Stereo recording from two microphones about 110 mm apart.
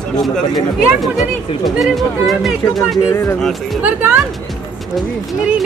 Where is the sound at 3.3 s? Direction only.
5° left (ahead or behind).